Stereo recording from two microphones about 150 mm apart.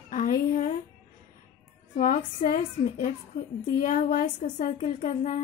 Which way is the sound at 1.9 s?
60° left (ahead or behind).